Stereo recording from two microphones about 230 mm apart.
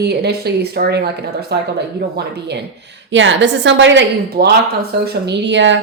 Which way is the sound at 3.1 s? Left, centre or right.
Right.